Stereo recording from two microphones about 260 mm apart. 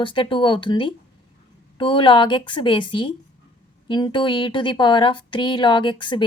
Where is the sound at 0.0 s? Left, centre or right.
Centre.